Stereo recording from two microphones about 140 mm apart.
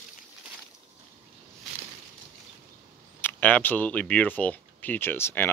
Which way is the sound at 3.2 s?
10° left (ahead or behind).